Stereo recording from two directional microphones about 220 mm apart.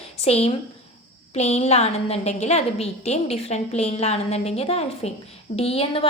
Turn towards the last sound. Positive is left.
turn(degrees=25)  # may be behind; listen again after turning